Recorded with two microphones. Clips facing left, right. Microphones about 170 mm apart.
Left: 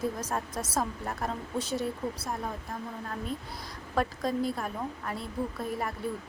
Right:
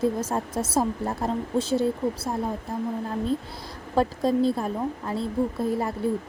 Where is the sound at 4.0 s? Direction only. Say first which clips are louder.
Right 7 dB; 30° right (ahead or behind).